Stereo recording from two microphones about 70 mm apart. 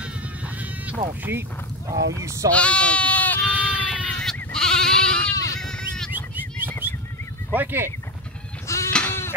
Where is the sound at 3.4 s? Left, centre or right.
Right.